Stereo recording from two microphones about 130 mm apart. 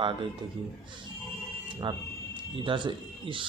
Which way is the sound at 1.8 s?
40° right (ahead or behind).